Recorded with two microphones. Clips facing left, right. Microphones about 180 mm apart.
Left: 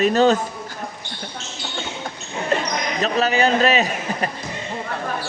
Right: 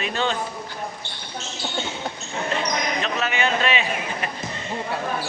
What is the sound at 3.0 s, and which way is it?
A man's voice, 35° left (ahead or behind).